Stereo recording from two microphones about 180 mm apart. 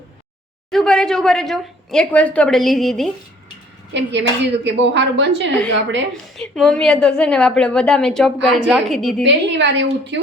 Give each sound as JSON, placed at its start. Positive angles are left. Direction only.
{"t": 0.7, "sound": "a woman's voice", "side_deg": 0}
{"t": 3.9, "sound": "speech", "side_deg": -80}
{"t": 6.3, "sound": "a woman's voice", "side_deg": 5}
{"t": 9.2, "sound": "speech", "side_deg": -80}